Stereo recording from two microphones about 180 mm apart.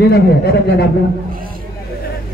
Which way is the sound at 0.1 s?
60° left (ahead or behind).